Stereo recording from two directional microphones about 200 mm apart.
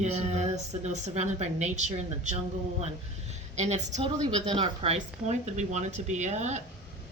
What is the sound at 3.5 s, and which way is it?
A woman's voice, 35° right (ahead or behind).